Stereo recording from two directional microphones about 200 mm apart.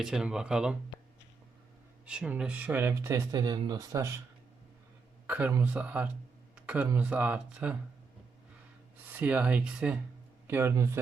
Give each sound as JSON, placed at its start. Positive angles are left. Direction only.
{"t": 0.0, "sound": "speech", "side_deg": -5}
{"t": 2.0, "sound": "speech", "side_deg": -5}
{"t": 5.2, "sound": "speech", "side_deg": -10}
{"t": 9.1, "sound": "speech", "side_deg": -5}